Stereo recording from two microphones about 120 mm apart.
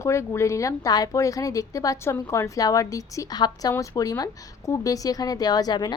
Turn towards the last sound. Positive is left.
turn(degrees=35)  # may be behind; listen again after turning